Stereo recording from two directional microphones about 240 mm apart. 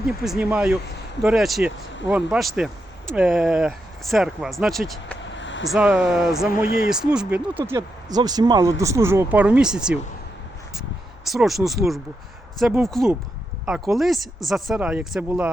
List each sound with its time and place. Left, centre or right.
0.2 s speech: centre
5.3 s vehicle: left
5.7 s speech: centre
6.5 s speech: left
6.9 s speech: centre
11.3 s speech: centre